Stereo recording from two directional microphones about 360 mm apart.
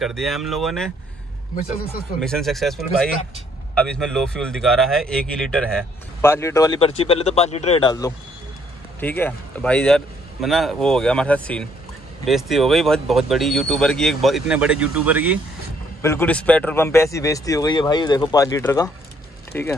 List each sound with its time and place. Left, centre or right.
0.0 s speech: centre
2.1 s speech: centre
16.0 s speech: centre